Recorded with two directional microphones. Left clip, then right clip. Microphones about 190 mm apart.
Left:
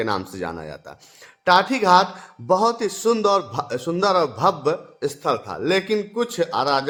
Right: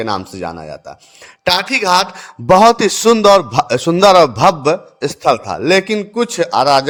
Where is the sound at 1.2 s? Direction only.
35° right (ahead or behind).